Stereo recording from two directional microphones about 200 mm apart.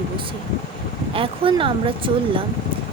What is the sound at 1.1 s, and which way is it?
Speech, 25° right (ahead or behind).